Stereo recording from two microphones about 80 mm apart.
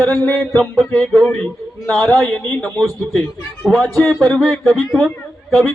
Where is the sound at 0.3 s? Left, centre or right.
Centre.